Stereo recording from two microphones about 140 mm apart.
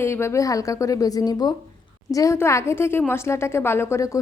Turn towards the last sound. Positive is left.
turn(degrees=20)  # may be behind; listen again after turning